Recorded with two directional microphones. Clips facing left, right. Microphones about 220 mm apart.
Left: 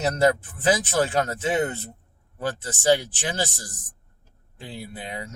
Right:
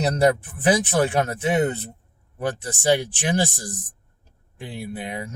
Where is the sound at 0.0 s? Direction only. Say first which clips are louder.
Right 2 dB; 15° right (ahead or behind).